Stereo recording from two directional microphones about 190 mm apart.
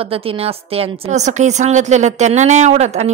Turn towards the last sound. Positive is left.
turn(degrees=-35)  # may be behind; listen again after turning